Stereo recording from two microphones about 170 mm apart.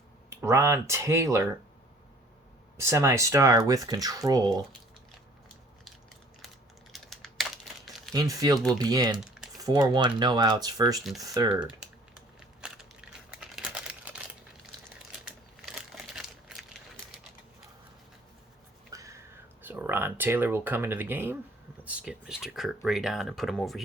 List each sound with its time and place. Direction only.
0.3 s speech: 15° right (ahead or behind)
2.7 s speech: 15° right (ahead or behind)
6.9 s computer keyboard: centre (ahead or behind)
8.1 s speech: 20° right (ahead or behind)
9.1 s typing: 5° right (ahead or behind)
9.6 s speech: 20° right (ahead or behind)
12.6 s crushing: 5° right (ahead or behind)
13.4 s crumpling: 5° right (ahead or behind)
18.9 s a sound: 20° right (ahead or behind)
19.6 s speech: 10° right (ahead or behind)